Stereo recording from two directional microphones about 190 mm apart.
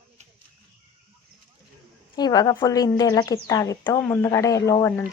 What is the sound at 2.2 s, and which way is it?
A woman's voice, 20° left (ahead or behind).